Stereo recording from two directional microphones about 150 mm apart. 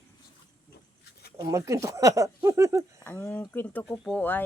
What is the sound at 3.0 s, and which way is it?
Speech, 15° left (ahead or behind).